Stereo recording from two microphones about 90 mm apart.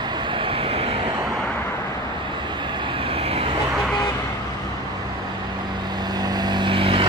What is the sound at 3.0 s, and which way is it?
Vehicle, 90° right.